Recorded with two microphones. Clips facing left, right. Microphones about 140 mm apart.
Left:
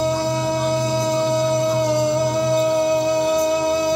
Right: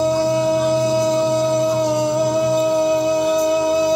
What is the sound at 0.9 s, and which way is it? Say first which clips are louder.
Music: right 3 dB; 10° right (ahead or behind).